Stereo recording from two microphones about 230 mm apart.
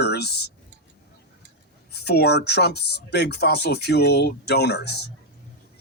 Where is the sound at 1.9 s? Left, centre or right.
Left.